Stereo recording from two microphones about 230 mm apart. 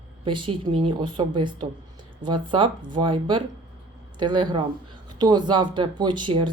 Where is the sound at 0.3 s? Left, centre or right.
Right.